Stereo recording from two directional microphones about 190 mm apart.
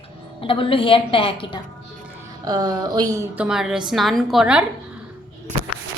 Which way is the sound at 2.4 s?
20° right (ahead or behind).